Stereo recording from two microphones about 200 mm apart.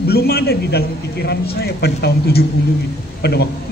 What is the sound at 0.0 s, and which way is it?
A man's voice, 50° left (ahead or behind).